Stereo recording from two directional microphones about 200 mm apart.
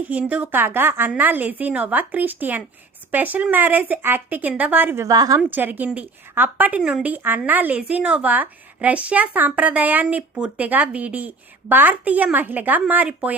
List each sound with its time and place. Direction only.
0.0 s a woman's voice: 5° right (ahead or behind)